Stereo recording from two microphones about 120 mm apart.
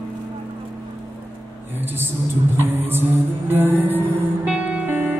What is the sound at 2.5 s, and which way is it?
Music, 20° right (ahead or behind).